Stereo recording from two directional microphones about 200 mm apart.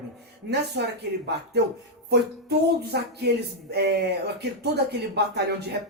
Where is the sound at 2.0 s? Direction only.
55° right (ahead or behind).